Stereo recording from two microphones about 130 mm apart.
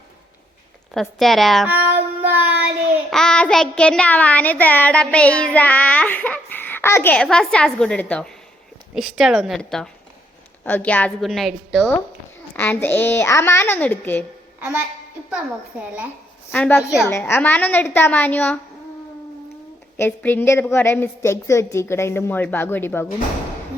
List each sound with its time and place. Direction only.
0.9 s a woman's voice: centre (ahead or behind)
1.6 s child singing: 15° right (ahead or behind)
3.1 s a child's voice: 5° left (ahead or behind)
9.0 s a woman's voice: centre (ahead or behind)
11.2 s a woman's voice: centre (ahead or behind)
12.5 s a child's voice: 15° left (ahead or behind)
16.5 s a child's voice: 15° left (ahead or behind)
20.0 s a child's voice: 15° left (ahead or behind)